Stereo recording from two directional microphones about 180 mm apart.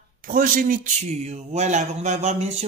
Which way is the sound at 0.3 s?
50° right (ahead or behind).